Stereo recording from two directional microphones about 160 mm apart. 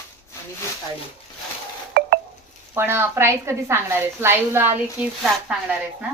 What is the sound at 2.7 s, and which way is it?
A woman's voice, 15° right (ahead or behind).